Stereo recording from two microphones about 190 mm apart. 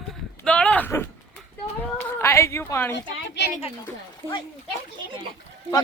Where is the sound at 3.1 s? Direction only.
65° left (ahead or behind).